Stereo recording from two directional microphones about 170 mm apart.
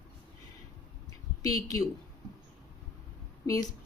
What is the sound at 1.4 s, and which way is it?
Speech, 20° left (ahead or behind).